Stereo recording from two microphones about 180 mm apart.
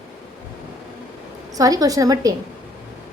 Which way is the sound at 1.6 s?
20° right (ahead or behind).